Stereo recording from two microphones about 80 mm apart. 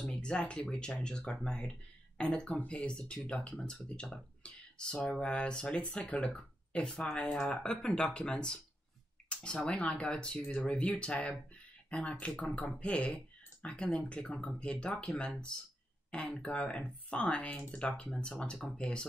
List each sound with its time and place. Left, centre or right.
0.0 s speech: centre